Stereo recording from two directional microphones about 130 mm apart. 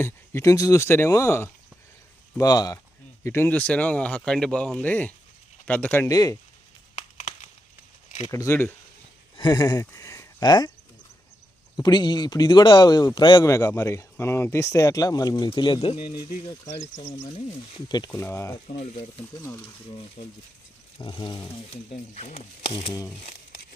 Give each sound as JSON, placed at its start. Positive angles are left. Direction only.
{"t": 0.0, "sound": "speech", "side_deg": 20}
{"t": 2.4, "sound": "speech", "side_deg": 30}
{"t": 3.2, "sound": "speech", "side_deg": 15}
{"t": 6.1, "sound": "speech", "side_deg": 30}
{"t": 6.9, "sound": "a sound", "side_deg": 55}
{"t": 8.3, "sound": "speech", "side_deg": 20}
{"t": 9.4, "sound": "speech", "side_deg": 35}
{"t": 11.8, "sound": "speech", "side_deg": 35}
{"t": 17.3, "sound": "speech", "side_deg": 50}
{"t": 17.8, "sound": "speech", "side_deg": 30}
{"t": 18.7, "sound": "speech", "side_deg": 60}
{"t": 19.4, "sound": "speech", "side_deg": 20}
{"t": 19.6, "sound": "speech", "side_deg": 40}
{"t": 22.1, "sound": "speech", "side_deg": 60}